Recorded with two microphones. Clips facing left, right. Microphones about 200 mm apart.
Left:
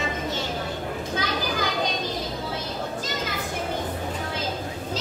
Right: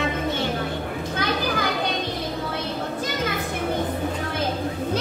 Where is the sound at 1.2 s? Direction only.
60° right (ahead or behind).